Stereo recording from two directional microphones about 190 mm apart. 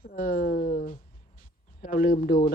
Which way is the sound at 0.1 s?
50° left (ahead or behind).